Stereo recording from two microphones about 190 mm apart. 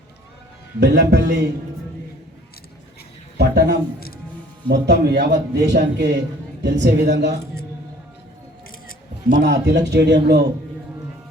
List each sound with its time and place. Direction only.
0.8 s a man's voice: 60° right (ahead or behind)
3.3 s a man's voice: 60° right (ahead or behind)
9.4 s a man's voice: 65° right (ahead or behind)